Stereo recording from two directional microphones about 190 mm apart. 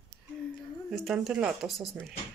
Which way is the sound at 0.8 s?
Centre (ahead or behind).